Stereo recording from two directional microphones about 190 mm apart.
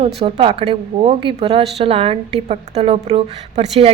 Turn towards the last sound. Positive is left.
turn(degrees=-30)  # may be behind; listen again after turning